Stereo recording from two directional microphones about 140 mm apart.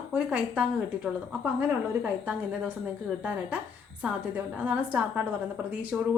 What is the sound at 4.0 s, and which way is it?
Speech, 10° right (ahead or behind).